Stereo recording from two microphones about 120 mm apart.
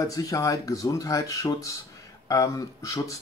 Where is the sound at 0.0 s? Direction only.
30° left (ahead or behind).